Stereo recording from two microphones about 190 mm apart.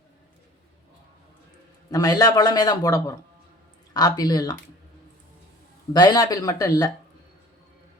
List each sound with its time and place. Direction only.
1.9 s a man's voice: 20° left (ahead or behind)
5.9 s a man's voice: 20° left (ahead or behind)